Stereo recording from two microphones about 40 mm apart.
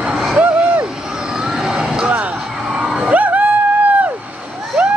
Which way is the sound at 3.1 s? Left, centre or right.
Right.